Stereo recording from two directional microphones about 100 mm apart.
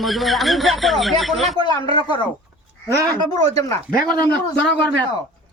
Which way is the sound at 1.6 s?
45° left (ahead or behind).